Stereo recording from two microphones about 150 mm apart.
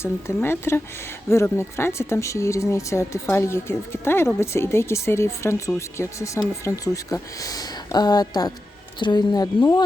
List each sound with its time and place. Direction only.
0.0 s speech: 15° left (ahead or behind)